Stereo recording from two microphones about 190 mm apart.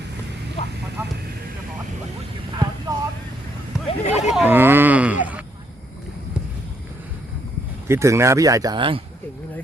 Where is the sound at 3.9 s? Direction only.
35° left (ahead or behind).